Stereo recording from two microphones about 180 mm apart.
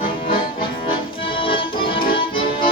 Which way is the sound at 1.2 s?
30° left (ahead or behind).